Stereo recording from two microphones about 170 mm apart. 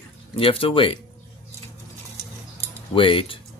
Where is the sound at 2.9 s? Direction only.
30° left (ahead or behind).